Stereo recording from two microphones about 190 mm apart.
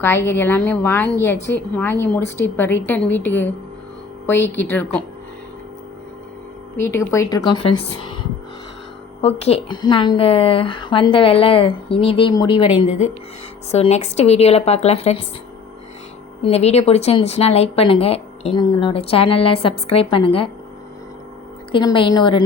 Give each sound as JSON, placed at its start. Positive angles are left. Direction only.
{"t": 0.0, "sound": "a woman's voice", "side_deg": 10}
{"t": 6.7, "sound": "a woman's voice", "side_deg": 15}
{"t": 9.2, "sound": "a woman's voice", "side_deg": 30}
{"t": 16.4, "sound": "a woman's voice", "side_deg": 35}
{"t": 21.7, "sound": "a woman's voice", "side_deg": 25}